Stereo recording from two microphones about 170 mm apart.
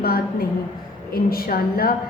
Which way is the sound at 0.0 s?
60° left (ahead or behind).